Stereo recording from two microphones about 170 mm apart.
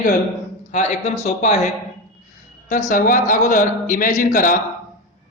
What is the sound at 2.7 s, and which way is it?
A man's voice, 45° left (ahead or behind).